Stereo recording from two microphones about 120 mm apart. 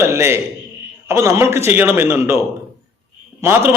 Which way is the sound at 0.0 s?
20° right (ahead or behind).